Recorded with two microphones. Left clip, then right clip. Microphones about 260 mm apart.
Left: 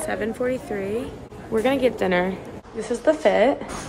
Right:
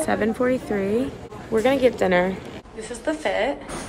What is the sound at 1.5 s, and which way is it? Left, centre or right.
Speech, centre.